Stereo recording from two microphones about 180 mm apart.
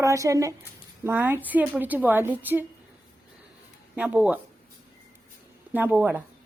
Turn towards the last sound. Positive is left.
turn(degrees=-10)  # may be behind; listen again after turning